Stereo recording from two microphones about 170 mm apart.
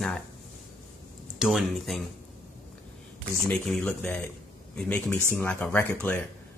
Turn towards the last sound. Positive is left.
turn(degrees=10)  # may be behind; listen again after turning